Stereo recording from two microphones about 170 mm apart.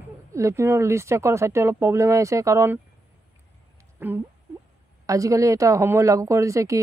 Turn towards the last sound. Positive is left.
turn(degrees=-20)  # may be behind; listen again after turning